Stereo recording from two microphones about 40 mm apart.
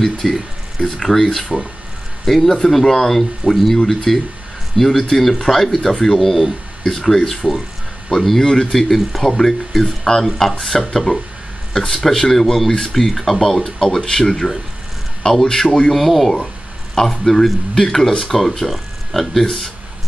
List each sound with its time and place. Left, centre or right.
0.0 s speech: centre
0.7 s speech: centre
1.0 s speech: centre
8.8 s speech: centre
15.9 s speech: centre